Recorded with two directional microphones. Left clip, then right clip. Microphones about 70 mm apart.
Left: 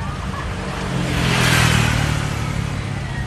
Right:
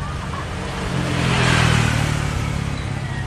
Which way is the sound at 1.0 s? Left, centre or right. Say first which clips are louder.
Left 1 dB; left.